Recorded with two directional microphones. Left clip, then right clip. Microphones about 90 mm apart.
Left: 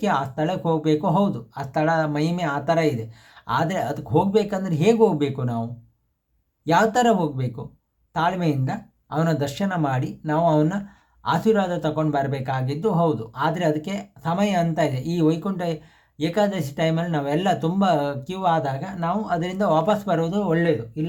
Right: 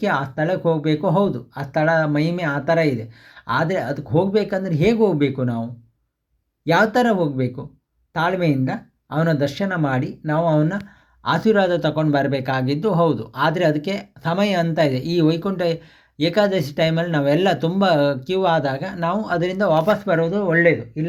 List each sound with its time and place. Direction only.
0.0 s speech: 25° right (ahead or behind)
6.7 s speech: 25° right (ahead or behind)
11.2 s speech: 35° right (ahead or behind)